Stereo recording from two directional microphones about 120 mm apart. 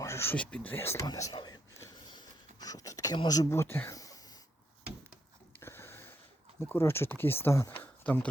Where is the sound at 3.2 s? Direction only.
30° left (ahead or behind).